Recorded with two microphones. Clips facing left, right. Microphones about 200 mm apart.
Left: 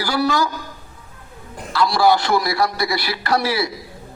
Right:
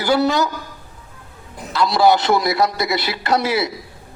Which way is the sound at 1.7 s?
20° right (ahead or behind).